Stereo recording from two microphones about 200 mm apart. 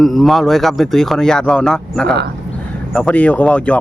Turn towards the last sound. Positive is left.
turn(degrees=5)  # may be behind; listen again after turning